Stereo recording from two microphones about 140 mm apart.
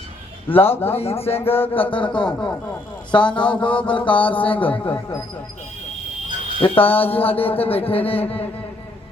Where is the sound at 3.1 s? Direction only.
35° left (ahead or behind).